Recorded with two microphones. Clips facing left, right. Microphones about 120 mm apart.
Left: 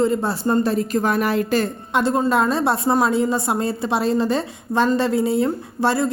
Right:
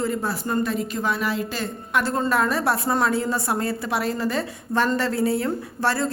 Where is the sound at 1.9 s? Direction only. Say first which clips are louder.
Left 4 dB; 20° left (ahead or behind).